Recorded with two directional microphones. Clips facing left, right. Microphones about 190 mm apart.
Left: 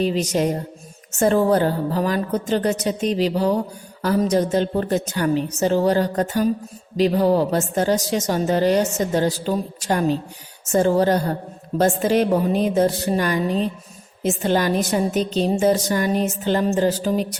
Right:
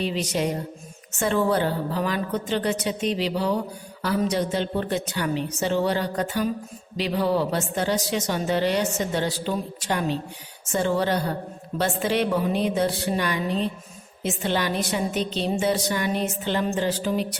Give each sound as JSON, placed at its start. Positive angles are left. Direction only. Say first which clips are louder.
{"t": 0.0, "sound": "a woman's voice", "louder": "left 5 dB", "side_deg": 40}